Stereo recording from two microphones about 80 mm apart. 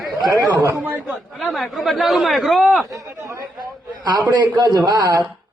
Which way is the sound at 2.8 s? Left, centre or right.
Right.